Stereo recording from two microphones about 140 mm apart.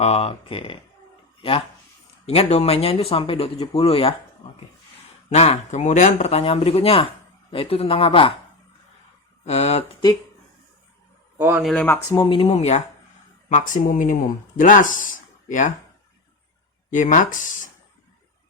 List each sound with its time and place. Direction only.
0.0 s speech: 45° left (ahead or behind)
5.3 s speech: 50° left (ahead or behind)
9.4 s speech: 50° left (ahead or behind)
11.3 s speech: 15° right (ahead or behind)
11.6 s speech: 5° left (ahead or behind)
12.2 s speech: 40° left (ahead or behind); by 13.8 s 55° left (ahead or behind)
13.8 s speech: 70° left (ahead or behind)
16.9 s speech: 70° left (ahead or behind)